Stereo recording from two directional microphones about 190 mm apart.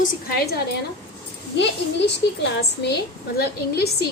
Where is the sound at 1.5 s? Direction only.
65° left (ahead or behind).